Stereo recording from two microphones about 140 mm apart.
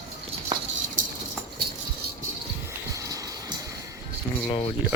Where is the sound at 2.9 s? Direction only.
25° right (ahead or behind).